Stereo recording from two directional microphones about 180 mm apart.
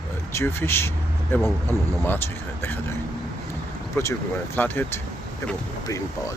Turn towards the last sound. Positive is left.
turn(degrees=15)  # may be behind; listen again after turning